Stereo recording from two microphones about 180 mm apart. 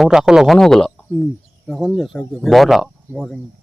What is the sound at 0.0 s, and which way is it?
Speech, 5° right (ahead or behind).